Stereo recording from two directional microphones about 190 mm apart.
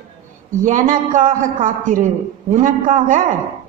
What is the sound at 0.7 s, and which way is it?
A woman's voice, 45° right (ahead or behind).